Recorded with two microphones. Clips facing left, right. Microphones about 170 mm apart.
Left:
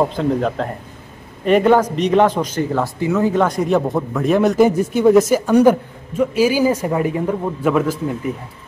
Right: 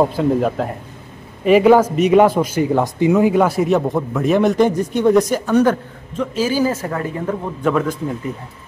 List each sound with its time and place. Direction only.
0.0 s a man's voice: 5° right (ahead or behind)